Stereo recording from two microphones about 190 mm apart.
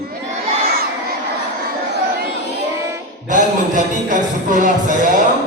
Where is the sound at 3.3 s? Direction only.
40° right (ahead or behind).